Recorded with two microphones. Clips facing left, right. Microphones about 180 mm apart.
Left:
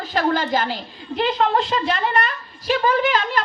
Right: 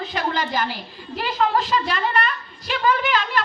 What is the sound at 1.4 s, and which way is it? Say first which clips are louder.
A woman's voice: right 3 dB; 40° left (ahead or behind).